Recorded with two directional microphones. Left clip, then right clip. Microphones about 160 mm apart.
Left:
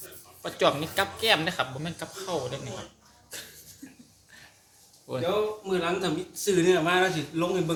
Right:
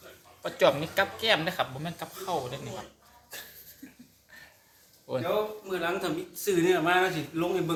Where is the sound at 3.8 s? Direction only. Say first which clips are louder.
Left 1 dB; centre (ahead or behind).